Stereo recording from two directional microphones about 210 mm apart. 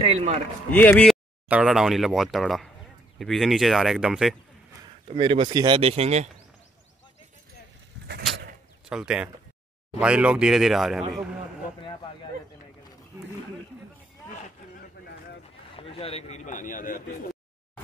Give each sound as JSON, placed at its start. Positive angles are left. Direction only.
{"t": 0.0, "sound": "speech", "side_deg": -30}
{"t": 0.7, "sound": "speech", "side_deg": 10}
{"t": 1.5, "sound": "speech", "side_deg": -5}
{"t": 5.0, "sound": "speech", "side_deg": -25}
{"t": 8.1, "sound": "a sound", "side_deg": -50}
{"t": 8.8, "sound": "speech", "side_deg": -5}
{"t": 11.8, "sound": "speech", "side_deg": 25}
{"t": 15.7, "sound": "a man's voice", "side_deg": 25}